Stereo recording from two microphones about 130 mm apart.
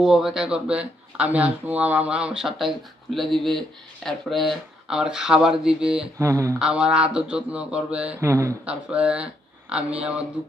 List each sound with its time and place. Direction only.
0.0 s speech: centre (ahead or behind)
6.1 s speech: 20° right (ahead or behind)
6.6 s speech: 5° right (ahead or behind)
8.2 s speech: 20° right (ahead or behind)
8.6 s speech: 10° right (ahead or behind)